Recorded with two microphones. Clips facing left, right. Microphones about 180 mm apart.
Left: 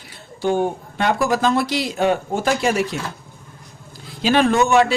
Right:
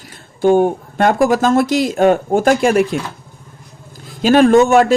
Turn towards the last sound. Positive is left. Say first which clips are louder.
# right 6 dB
turn(degrees=-45)  # may be behind; listen again after turning